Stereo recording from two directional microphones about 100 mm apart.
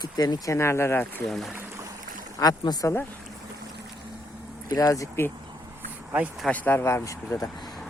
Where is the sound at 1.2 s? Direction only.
Centre (ahead or behind).